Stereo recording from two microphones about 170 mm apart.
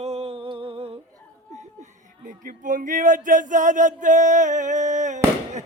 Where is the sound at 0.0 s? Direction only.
35° right (ahead or behind).